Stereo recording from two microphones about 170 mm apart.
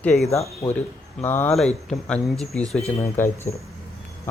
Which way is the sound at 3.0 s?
10° left (ahead or behind).